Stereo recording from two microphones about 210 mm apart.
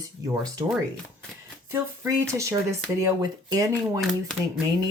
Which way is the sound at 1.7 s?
15° right (ahead or behind).